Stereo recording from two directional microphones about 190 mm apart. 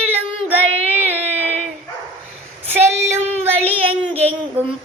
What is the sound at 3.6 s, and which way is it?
Child singing, 30° right (ahead or behind).